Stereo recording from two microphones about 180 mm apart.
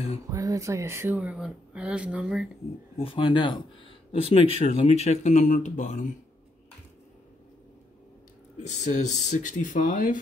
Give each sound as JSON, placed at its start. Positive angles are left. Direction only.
{"t": 0.3, "sound": "speech", "side_deg": -20}
{"t": 3.0, "sound": "speech", "side_deg": 30}
{"t": 8.6, "sound": "speech", "side_deg": 40}